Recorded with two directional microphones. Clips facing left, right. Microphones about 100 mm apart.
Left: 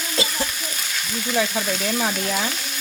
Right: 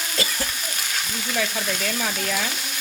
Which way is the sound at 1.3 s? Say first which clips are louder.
Left 4 dB; 25° left (ahead or behind).